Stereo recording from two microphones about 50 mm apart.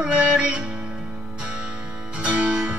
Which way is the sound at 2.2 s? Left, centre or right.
Right.